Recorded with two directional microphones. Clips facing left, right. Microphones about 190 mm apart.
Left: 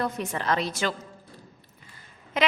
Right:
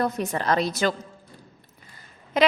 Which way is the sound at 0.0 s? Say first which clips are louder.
Right 4 dB; 40° right (ahead or behind).